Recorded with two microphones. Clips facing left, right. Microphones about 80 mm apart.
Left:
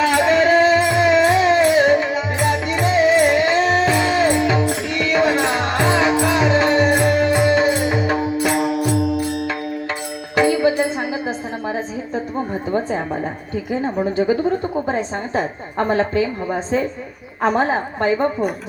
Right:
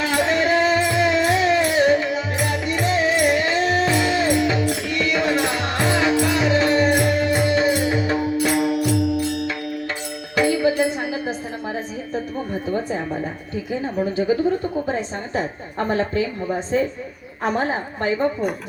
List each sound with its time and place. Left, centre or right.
0.0 s music: left
5.8 s music: left
13.8 s a woman's voice: left
15.4 s a woman's voice: left